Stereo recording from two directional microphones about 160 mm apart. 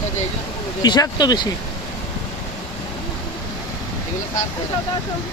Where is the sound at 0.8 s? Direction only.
25° left (ahead or behind).